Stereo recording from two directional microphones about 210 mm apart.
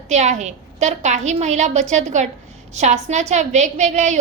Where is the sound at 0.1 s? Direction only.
35° right (ahead or behind).